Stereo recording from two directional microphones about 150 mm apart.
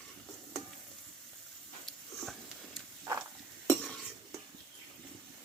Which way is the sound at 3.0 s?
20° right (ahead or behind).